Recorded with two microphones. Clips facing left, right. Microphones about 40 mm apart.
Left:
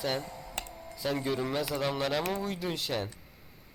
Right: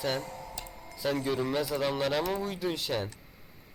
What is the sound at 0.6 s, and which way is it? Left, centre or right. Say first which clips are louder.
Music: left 4 dB; left.